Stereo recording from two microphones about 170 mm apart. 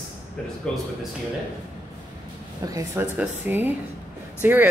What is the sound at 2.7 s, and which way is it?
A woman's voice, 15° right (ahead or behind).